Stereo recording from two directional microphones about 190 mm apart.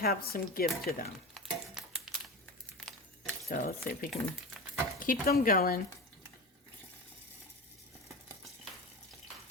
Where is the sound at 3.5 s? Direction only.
50° left (ahead or behind).